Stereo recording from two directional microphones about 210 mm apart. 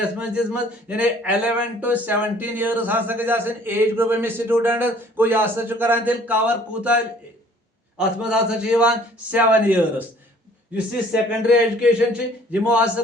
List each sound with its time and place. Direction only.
0.0 s a man's voice: 5° right (ahead or behind)
11.1 s a man's voice: 5° right (ahead or behind)